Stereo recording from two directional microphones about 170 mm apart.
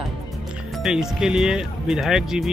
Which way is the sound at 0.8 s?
5° right (ahead or behind).